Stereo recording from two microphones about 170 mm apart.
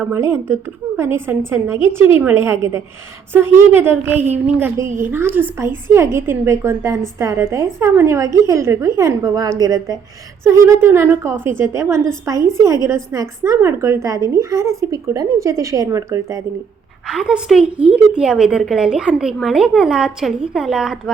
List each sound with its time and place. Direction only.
0.0 s a woman's voice: 15° right (ahead or behind)
17.1 s a woman's voice: 5° right (ahead or behind)